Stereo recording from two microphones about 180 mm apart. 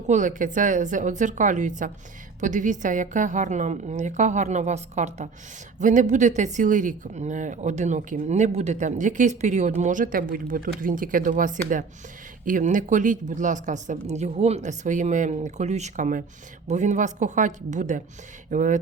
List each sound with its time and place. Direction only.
0.1 s speech: 45° right (ahead or behind)